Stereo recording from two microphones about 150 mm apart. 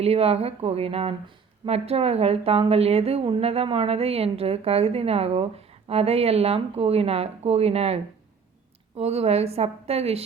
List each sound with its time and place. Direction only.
0.0 s a woman's voice: 40° right (ahead or behind)